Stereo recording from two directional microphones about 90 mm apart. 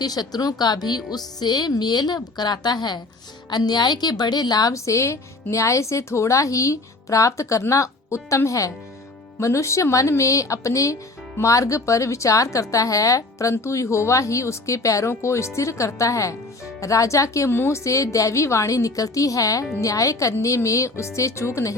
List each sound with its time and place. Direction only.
0.0 s a woman's voice: 45° left (ahead or behind)